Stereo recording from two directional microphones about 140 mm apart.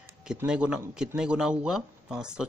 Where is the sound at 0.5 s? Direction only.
5° right (ahead or behind).